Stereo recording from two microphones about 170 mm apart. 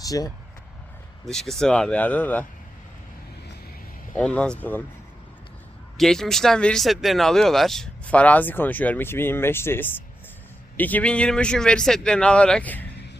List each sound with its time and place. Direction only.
0.0 s speech: 20° left (ahead or behind)
1.2 s speech: centre (ahead or behind)
4.1 s speech: 5° left (ahead or behind)
6.0 s speech: 5° left (ahead or behind)